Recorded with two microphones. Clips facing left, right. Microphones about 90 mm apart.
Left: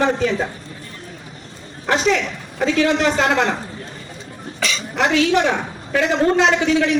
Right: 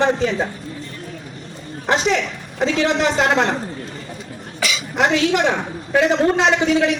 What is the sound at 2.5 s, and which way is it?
Speech, 20° right (ahead or behind).